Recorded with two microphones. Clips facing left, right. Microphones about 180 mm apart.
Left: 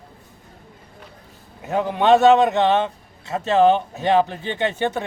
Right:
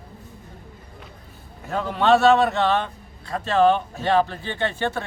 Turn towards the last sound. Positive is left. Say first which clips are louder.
# left 3 dB
turn(degrees=20)  # may be behind; listen again after turning